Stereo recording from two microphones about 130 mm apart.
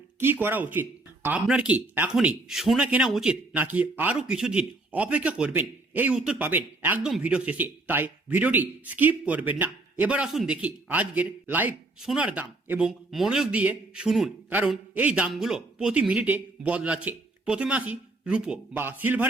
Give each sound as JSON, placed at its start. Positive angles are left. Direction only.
{"t": 0.2, "sound": "a man's voice", "side_deg": -15}